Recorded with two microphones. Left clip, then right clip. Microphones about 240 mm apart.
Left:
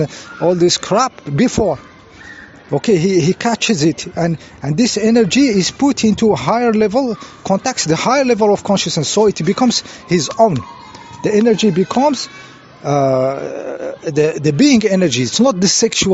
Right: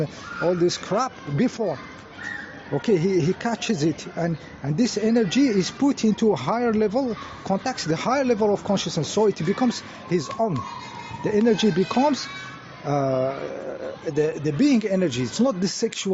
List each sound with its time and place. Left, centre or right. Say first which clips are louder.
0.0 s speech: left 8 dB; left
2.7 s speech: left 8 dB; left